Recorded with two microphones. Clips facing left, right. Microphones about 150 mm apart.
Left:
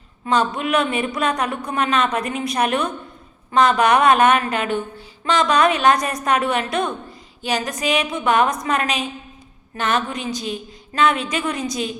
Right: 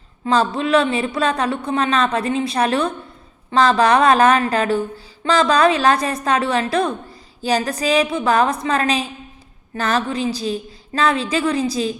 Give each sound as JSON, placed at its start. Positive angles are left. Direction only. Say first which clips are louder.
{"t": 0.3, "sound": "a woman's voice", "louder": "right 3 dB", "side_deg": -30}